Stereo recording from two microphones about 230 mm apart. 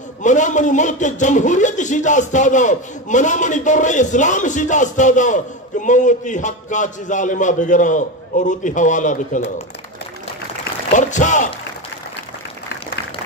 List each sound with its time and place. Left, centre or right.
0.2 s a man's voice: left
10.9 s a man's voice: left